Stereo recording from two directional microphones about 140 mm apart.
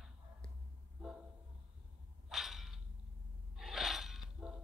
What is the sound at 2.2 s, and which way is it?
Whip, 5° right (ahead or behind).